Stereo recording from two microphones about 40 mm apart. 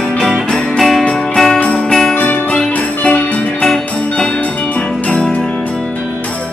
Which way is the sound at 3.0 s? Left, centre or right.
Left.